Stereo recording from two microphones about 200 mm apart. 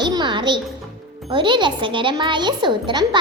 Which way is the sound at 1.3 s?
25° right (ahead or behind).